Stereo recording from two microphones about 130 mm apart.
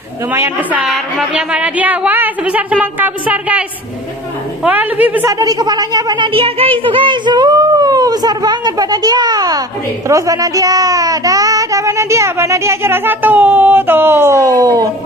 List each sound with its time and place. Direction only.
0.3 s a woman's voice: 15° right (ahead or behind)
0.8 s a woman's voice: centre (ahead or behind)
4.6 s a woman's voice: 10° right (ahead or behind)
5.3 s a child's voice: 30° right (ahead or behind)